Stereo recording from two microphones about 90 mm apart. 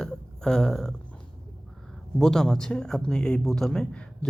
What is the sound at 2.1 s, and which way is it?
Speech, 5° left (ahead or behind).